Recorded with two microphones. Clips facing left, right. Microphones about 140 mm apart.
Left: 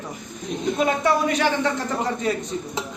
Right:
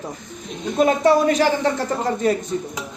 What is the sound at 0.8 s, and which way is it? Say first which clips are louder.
Speech: right 6 dB; 35° right (ahead or behind).